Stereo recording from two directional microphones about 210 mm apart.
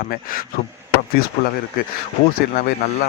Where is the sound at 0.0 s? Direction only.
45° left (ahead or behind).